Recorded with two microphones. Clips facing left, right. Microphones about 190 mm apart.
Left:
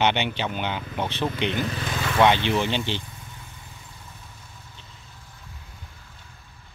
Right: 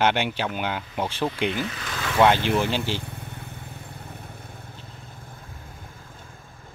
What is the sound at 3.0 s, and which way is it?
Vehicle, 60° right (ahead or behind).